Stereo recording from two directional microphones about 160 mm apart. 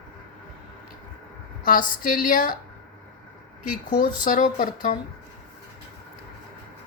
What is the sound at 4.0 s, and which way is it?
Speech, 55° left (ahead or behind).